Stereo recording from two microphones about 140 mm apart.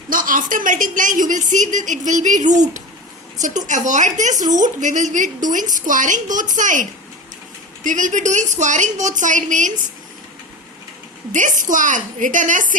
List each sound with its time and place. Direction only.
0.1 s a woman's voice: 75° right (ahead or behind)
7.9 s a woman's voice: 65° right (ahead or behind)
11.3 s a woman's voice: 65° right (ahead or behind)